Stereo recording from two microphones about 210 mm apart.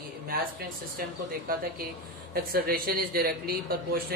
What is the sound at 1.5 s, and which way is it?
A man's voice, 45° right (ahead or behind).